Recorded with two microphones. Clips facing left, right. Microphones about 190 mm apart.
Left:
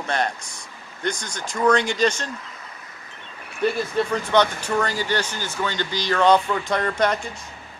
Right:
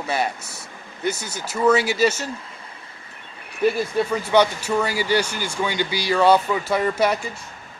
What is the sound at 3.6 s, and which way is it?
Speech, 10° right (ahead or behind).